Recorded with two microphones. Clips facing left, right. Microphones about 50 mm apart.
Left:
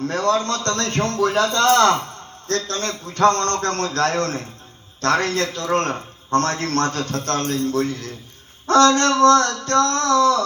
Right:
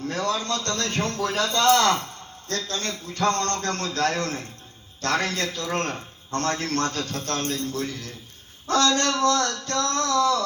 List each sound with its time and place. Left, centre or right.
0.1 s a man's voice: left